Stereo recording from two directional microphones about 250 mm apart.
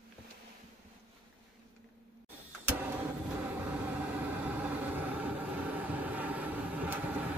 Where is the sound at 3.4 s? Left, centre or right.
Centre.